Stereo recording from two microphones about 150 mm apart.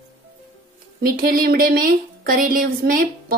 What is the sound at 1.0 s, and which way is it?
Speech, 80° right.